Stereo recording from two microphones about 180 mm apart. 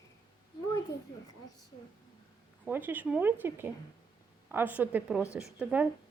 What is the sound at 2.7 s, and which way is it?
A woman's voice, 10° right (ahead or behind).